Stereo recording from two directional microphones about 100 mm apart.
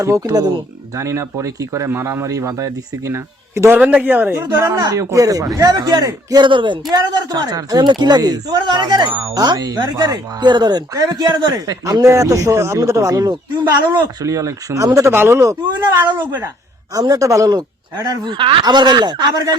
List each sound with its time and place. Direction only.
0.0 s speech: 35° right (ahead or behind)
3.8 s speech: 15° right (ahead or behind); by 6.4 s 35° right (ahead or behind)
6.4 s speech: 55° right (ahead or behind)
6.9 s speech: 40° right (ahead or behind)
16.2 s a woman's voice: 20° right (ahead or behind)
16.9 s speech: 35° right (ahead or behind)